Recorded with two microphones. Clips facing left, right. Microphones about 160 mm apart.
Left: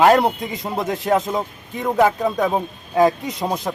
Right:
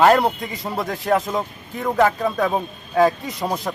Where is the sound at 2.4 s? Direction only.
15° left (ahead or behind).